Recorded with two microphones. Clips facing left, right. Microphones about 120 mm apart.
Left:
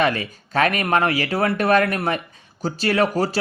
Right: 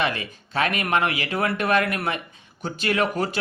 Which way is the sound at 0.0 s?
40° left (ahead or behind).